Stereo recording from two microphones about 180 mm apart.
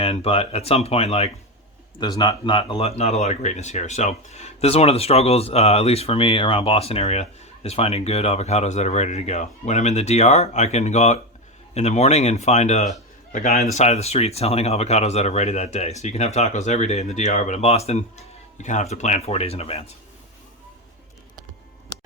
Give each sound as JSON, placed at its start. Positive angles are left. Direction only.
{"t": 0.0, "sound": "speech", "side_deg": 35}
{"t": 2.0, "sound": "speech", "side_deg": 25}